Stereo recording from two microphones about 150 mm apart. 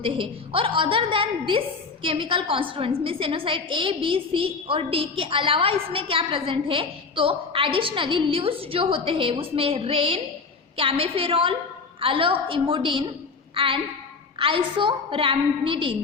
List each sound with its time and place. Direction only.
0.0 s a woman's voice: 35° right (ahead or behind)